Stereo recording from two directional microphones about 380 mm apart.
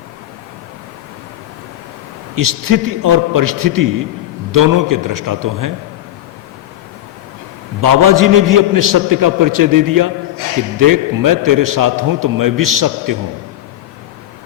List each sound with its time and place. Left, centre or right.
2.3 s a man's voice: right
7.8 s a man's voice: right